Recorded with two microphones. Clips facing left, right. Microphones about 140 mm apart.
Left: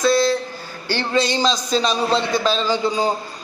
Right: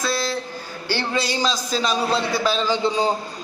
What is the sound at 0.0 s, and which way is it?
A man's voice, 5° right (ahead or behind).